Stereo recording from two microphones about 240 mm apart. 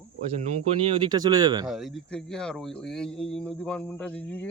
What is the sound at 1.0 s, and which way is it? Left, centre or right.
Speech, centre.